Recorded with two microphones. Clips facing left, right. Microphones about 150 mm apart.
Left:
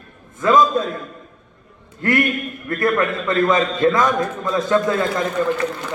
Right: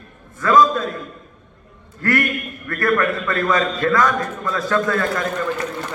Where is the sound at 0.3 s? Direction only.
20° left (ahead or behind).